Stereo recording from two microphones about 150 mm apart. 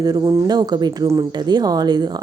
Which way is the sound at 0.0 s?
25° right (ahead or behind).